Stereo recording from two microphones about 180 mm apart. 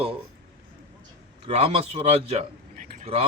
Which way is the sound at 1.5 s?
35° right (ahead or behind).